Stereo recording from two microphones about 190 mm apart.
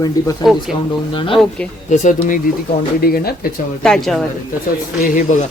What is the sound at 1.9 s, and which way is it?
Speech, 40° left (ahead or behind).